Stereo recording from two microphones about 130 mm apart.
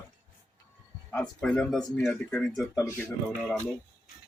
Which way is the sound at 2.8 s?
25° left (ahead or behind).